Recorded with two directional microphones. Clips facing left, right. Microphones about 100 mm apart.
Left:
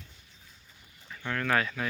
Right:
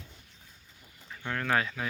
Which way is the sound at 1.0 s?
15° right (ahead or behind).